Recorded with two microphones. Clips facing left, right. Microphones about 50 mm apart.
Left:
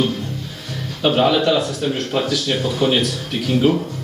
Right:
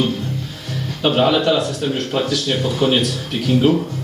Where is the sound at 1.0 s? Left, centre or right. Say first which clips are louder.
Even; centre.